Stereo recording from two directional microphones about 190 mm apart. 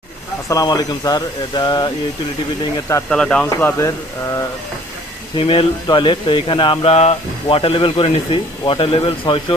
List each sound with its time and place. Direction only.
0.4 s speech: 20° left (ahead or behind)
3.1 s speech: 5° left (ahead or behind)
5.4 s speech: 30° left (ahead or behind)